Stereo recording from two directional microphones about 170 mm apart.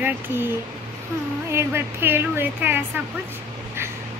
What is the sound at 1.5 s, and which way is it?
Speech, 15° right (ahead or behind).